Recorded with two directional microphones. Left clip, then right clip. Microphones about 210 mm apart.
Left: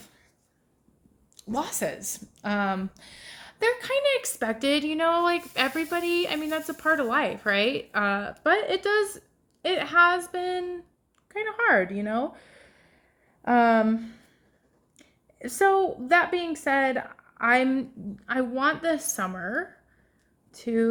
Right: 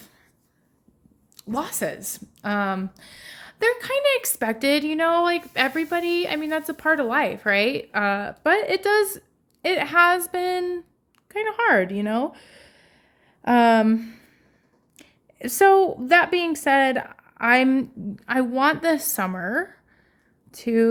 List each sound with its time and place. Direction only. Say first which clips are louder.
1.4 s a woman's voice: right 2 dB; 25° right (ahead or behind)
11.9 s a sound: right 3 dB; 30° right (ahead or behind)
13.4 s a woman's voice: right 3 dB; 30° right (ahead or behind)